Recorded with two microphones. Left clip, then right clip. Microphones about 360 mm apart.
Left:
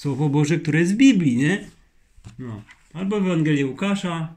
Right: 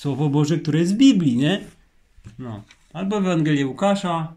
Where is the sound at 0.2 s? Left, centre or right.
Left.